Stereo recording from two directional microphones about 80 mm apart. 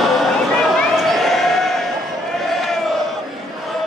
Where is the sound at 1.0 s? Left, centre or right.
Centre.